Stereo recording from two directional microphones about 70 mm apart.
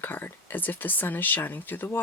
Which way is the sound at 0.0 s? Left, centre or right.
Left.